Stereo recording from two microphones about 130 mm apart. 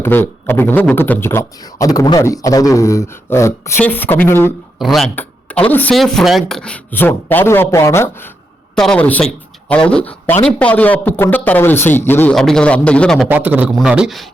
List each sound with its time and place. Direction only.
0.0 s a man's voice: 15° left (ahead or behind)
4.8 s speech: centre (ahead or behind)
5.1 s speech: 10° left (ahead or behind)
8.7 s a man's voice: 5° left (ahead or behind)
12.3 s speech: 5° left (ahead or behind)
13.2 s a man's voice: 15° right (ahead or behind)